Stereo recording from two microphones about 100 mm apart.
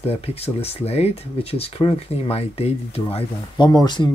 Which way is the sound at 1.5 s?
75° left (ahead or behind).